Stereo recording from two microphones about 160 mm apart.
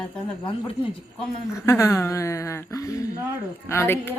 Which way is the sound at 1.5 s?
15° left (ahead or behind).